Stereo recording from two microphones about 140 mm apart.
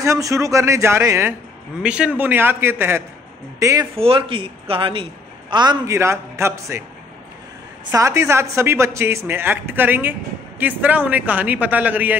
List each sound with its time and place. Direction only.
0.0 s speech: 20° right (ahead or behind)
1.8 s a man's voice: 5° right (ahead or behind)
3.9 s speech: 45° right (ahead or behind)
5.9 s speech: 20° right (ahead or behind)
7.9 s a man's voice: 20° right (ahead or behind)